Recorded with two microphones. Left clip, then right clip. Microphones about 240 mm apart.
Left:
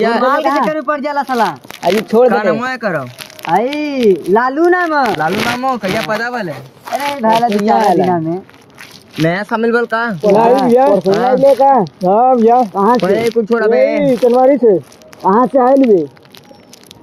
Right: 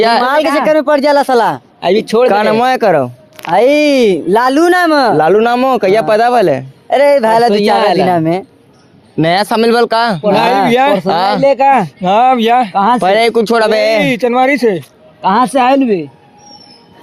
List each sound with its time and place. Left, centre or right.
0.0 s speech: right
3.5 s speech: right
7.2 s speech: right
12.7 s speech: right